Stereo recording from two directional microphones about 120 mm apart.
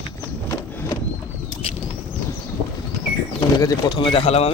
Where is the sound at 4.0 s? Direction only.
50° left (ahead or behind).